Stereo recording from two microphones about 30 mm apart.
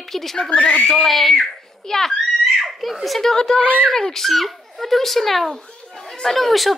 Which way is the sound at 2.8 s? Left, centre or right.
Centre.